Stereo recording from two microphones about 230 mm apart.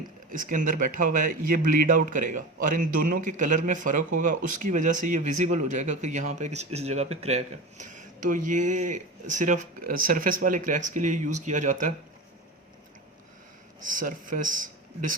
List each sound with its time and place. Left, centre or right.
0.3 s speech: right
13.8 s speech: right